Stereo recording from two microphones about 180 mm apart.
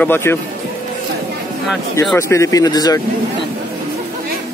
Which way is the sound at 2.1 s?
15° left (ahead or behind).